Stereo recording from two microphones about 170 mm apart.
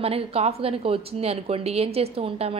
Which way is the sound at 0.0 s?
35° right (ahead or behind).